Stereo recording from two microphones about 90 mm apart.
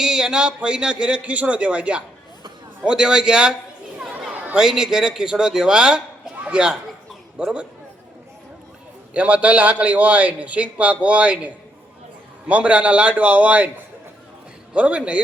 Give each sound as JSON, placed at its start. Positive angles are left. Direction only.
{"t": 0.0, "sound": "a man's voice", "side_deg": -5}
{"t": 4.1, "sound": "chatter", "side_deg": -15}
{"t": 4.6, "sound": "a man's voice", "side_deg": -5}
{"t": 9.1, "sound": "a man's voice", "side_deg": -15}
{"t": 14.7, "sound": "a man's voice", "side_deg": -15}